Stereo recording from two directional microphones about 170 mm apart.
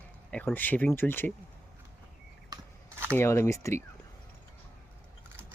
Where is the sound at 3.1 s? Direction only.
15° left (ahead or behind).